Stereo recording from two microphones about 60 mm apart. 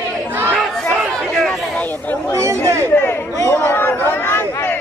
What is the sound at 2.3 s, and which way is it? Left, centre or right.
Chatter, right.